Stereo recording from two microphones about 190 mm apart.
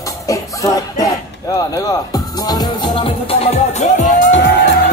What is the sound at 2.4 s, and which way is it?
Music, 20° left (ahead or behind).